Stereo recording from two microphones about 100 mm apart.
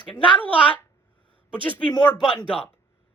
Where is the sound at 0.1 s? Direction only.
15° left (ahead or behind).